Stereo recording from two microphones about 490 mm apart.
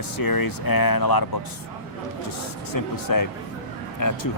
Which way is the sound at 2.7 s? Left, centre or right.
Left.